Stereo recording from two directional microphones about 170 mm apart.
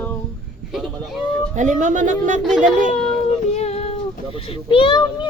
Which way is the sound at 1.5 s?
45° right (ahead or behind).